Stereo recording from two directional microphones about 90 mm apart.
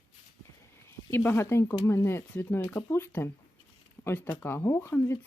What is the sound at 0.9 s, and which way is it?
Speech, 25° left (ahead or behind).